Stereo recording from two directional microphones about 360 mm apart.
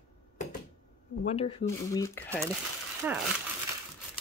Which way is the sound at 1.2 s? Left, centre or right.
Centre.